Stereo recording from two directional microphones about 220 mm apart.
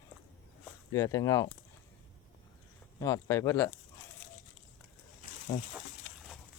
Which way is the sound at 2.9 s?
15° left (ahead or behind).